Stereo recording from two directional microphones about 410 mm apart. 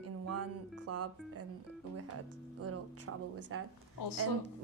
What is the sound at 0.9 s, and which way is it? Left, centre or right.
Speech, right.